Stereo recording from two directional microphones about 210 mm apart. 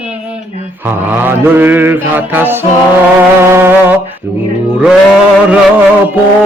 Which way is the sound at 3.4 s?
10° right (ahead or behind).